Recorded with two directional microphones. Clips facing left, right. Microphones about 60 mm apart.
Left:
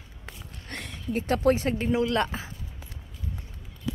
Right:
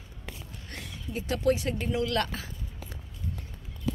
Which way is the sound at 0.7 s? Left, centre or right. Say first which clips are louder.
Left 6 dB; left.